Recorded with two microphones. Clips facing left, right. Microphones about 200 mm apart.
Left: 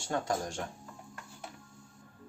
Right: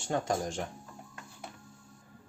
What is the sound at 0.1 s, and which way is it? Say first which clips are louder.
Speech: right 2 dB; 20° right (ahead or behind).